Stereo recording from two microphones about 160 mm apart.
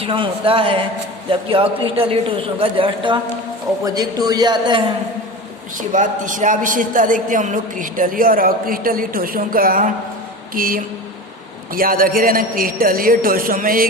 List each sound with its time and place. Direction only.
0.0 s a man's voice: 35° right (ahead or behind)
5.7 s a woman's voice: 55° right (ahead or behind)